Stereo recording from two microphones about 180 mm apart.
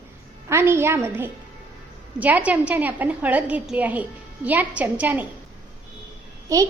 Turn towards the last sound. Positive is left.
turn(degrees=-20)  # may be behind; listen again after turning